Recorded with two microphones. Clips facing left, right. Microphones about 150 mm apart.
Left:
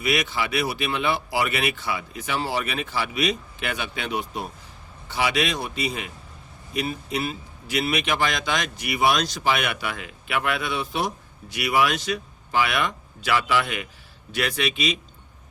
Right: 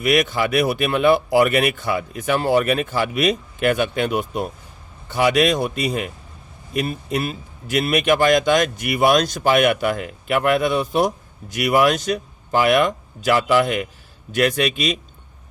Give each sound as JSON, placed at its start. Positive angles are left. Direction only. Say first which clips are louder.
{"t": 0.0, "sound": "speech", "louder": "right 7 dB", "side_deg": -50}